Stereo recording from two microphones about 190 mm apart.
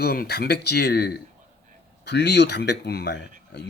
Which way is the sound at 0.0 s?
55° left (ahead or behind).